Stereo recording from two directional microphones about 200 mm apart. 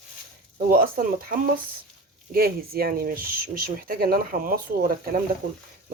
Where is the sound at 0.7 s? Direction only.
45° right (ahead or behind).